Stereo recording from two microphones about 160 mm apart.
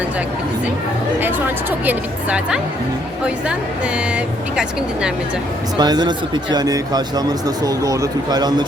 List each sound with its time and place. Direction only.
1.9 s a woman's voice: 5° right (ahead or behind)
5.7 s speech: 25° right (ahead or behind)